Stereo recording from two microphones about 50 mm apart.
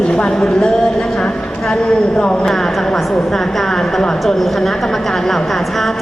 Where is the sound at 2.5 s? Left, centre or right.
Centre.